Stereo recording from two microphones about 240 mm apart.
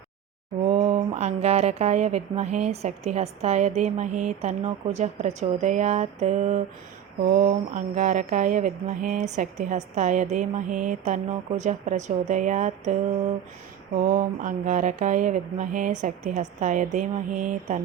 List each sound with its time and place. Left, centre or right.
0.6 s speech: right
14.0 s speech: right